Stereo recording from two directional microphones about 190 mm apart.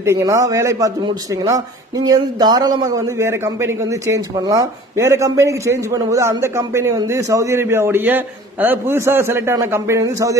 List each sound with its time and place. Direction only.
0.0 s a man's voice: 15° right (ahead or behind)